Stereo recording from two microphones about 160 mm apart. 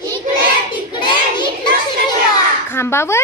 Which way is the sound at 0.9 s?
30° left (ahead or behind).